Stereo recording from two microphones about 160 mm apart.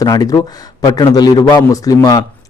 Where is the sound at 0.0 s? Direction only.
20° left (ahead or behind).